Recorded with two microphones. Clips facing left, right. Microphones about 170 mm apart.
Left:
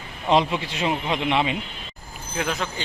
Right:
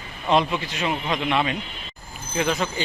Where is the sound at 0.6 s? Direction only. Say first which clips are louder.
Left 1 dB; 25° left (ahead or behind).